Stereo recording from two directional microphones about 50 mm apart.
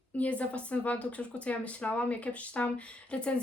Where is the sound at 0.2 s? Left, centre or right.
Left.